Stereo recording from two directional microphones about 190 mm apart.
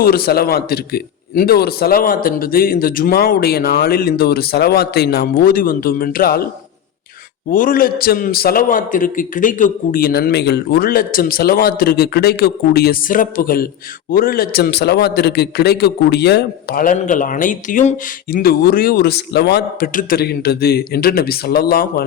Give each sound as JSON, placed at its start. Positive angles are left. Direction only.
{"t": 0.0, "sound": "a man's voice", "side_deg": 55}
{"t": 7.5, "sound": "a man's voice", "side_deg": 45}